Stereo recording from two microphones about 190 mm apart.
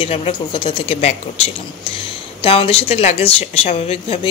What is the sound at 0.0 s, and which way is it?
A woman's voice, 30° left (ahead or behind).